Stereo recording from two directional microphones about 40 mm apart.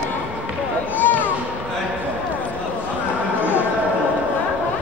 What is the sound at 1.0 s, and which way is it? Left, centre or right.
Music, left.